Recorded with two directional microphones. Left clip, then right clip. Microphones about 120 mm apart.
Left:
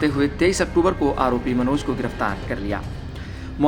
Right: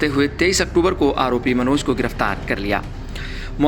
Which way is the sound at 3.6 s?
15° right (ahead or behind).